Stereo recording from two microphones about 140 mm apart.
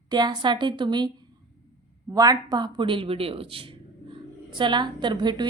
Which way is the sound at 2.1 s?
25° right (ahead or behind).